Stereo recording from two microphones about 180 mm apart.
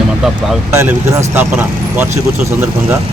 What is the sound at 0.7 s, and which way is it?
Speech, 15° right (ahead or behind).